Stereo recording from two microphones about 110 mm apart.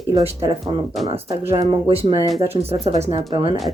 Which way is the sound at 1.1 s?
60° right (ahead or behind).